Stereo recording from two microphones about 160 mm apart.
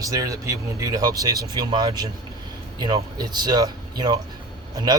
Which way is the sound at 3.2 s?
25° right (ahead or behind).